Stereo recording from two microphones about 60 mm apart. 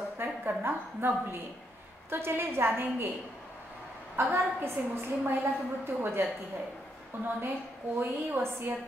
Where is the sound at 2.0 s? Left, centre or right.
Right.